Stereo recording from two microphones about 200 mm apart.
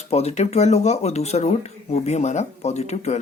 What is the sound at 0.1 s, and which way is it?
Speech, 30° left (ahead or behind).